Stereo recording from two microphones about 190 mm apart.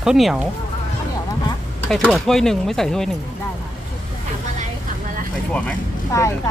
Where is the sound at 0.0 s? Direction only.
Centre (ahead or behind).